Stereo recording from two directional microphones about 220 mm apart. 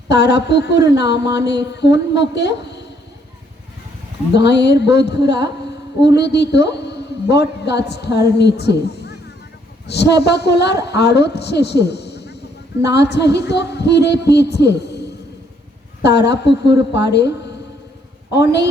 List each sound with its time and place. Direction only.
0.1 s a woman's voice: 50° left (ahead or behind)
4.4 s a woman's voice: 50° left (ahead or behind)